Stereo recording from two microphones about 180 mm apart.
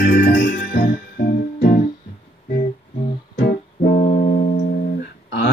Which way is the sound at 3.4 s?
45° left (ahead or behind).